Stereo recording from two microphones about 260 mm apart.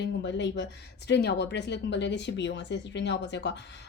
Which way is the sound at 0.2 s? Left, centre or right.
Left.